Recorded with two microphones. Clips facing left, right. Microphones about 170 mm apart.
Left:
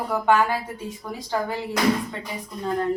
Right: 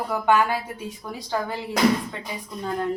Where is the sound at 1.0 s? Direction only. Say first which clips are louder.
Left 1 dB; 5° left (ahead or behind).